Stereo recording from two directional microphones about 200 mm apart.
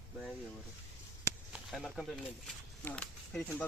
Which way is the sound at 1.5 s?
Centre (ahead or behind).